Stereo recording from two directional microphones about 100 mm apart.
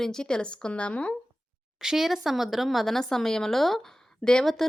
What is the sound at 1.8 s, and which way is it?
Speech, 5° right (ahead or behind).